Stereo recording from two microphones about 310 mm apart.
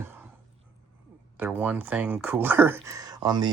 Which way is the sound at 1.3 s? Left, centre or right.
Centre.